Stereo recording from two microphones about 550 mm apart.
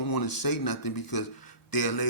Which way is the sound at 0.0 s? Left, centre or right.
Left.